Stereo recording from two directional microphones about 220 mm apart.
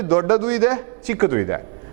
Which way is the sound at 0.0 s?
15° right (ahead or behind).